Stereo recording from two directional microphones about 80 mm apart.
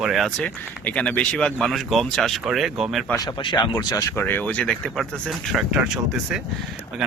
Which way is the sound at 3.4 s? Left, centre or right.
Left.